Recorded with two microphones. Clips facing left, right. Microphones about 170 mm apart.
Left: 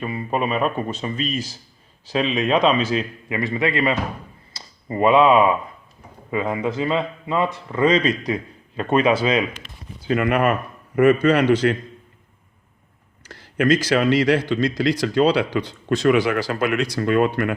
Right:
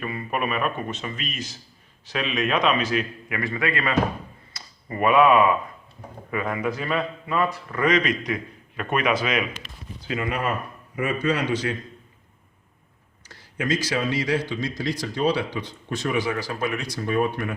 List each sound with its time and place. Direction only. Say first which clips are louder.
0.0 s a man's voice: left 4 dB; 25° left (ahead or behind)
4.5 s a sound: left 6 dB; 25° left (ahead or behind)
6.3 s a man's voice: left 4 dB; 25° left (ahead or behind)
10.2 s a man's voice: left 7 dB; 65° left (ahead or behind)
13.6 s speech: left 7 dB; 60° left (ahead or behind); by 17.5 s 85° left